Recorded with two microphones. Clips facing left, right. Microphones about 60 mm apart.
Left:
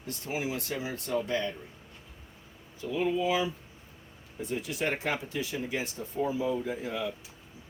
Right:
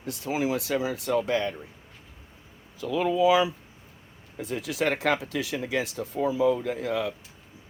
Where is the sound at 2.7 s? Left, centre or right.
Right.